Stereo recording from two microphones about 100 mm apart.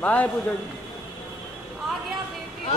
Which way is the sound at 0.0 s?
15° left (ahead or behind).